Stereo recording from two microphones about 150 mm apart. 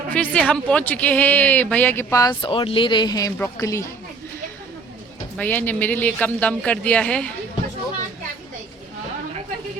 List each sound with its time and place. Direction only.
0.1 s speech: 10° left (ahead or behind)
2.4 s a woman's voice: 35° left (ahead or behind); by 3.9 s 20° left (ahead or behind)
5.4 s speech: 10° left (ahead or behind)